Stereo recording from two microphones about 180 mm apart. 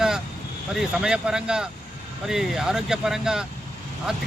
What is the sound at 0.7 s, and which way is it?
Speech, 5° right (ahead or behind).